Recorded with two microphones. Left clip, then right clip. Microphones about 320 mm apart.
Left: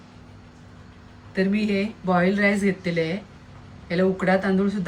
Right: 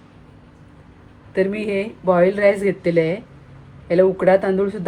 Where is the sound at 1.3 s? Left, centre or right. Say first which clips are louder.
Right 4 dB; centre.